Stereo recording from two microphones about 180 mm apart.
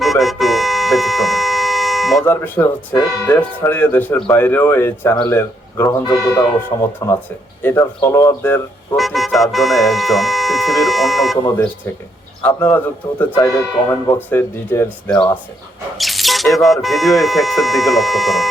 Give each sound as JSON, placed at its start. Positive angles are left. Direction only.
{"t": 0.0, "sound": "music", "side_deg": 0}
{"t": 2.2, "sound": "speech", "side_deg": 10}
{"t": 9.0, "sound": "speech", "side_deg": 0}
{"t": 11.4, "sound": "speech", "side_deg": 15}
{"t": 16.0, "sound": "speech", "side_deg": 0}